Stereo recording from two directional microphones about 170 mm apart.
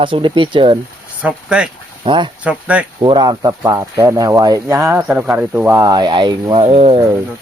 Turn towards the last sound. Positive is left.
turn(degrees=-35)  # may be behind; listen again after turning